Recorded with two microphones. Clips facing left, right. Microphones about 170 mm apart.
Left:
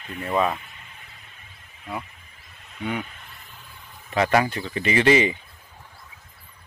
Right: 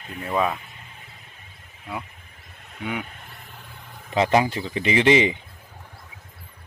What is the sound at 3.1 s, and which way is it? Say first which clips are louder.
Vehicle: right 3 dB; 45° right (ahead or behind).